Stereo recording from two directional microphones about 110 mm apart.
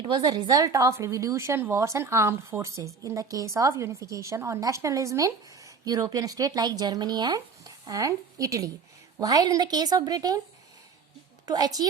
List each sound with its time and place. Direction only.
0.0 s a woman's voice: 40° right (ahead or behind)
11.4 s a woman's voice: 35° right (ahead or behind)